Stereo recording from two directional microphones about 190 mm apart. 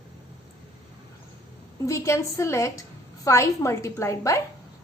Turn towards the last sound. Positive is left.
turn(degrees=15)  # may be behind; listen again after turning